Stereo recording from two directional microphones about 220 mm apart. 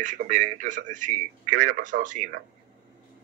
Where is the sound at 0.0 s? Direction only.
35° right (ahead or behind).